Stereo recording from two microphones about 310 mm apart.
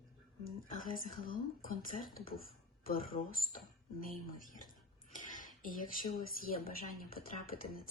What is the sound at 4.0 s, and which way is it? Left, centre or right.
Speech, left.